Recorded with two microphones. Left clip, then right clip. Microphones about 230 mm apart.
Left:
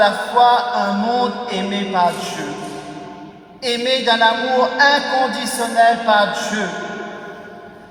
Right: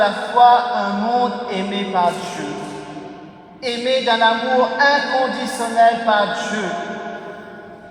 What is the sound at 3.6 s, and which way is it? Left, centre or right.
A man's voice, left.